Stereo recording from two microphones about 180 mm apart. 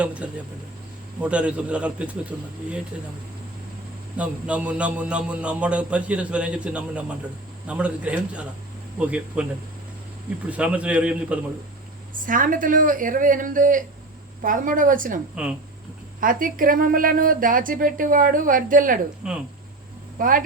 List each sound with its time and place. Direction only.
0.0 s a man's voice: 5° right (ahead or behind)
4.2 s a man's voice: 5° right (ahead or behind)
10.5 s a man's voice: 5° right (ahead or behind)
12.1 s a woman's voice: 50° right (ahead or behind)
16.2 s a woman's voice: 50° right (ahead or behind)
19.2 s speech: 5° right (ahead or behind)
20.1 s speech: 50° right (ahead or behind)